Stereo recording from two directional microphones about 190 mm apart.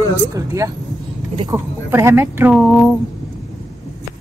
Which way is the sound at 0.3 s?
15° right (ahead or behind).